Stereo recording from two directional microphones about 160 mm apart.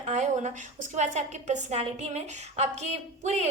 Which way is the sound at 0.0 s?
45° right (ahead or behind).